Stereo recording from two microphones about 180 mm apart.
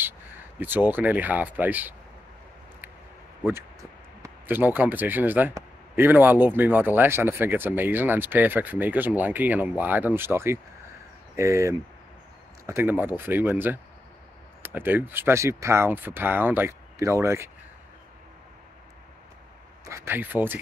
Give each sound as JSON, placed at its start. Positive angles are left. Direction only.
{"t": 0.6, "sound": "speech", "side_deg": -10}
{"t": 4.2, "sound": "speech", "side_deg": -10}
{"t": 19.8, "sound": "speech", "side_deg": -15}